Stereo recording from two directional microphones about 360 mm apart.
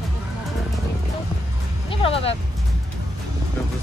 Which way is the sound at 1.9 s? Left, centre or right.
Centre.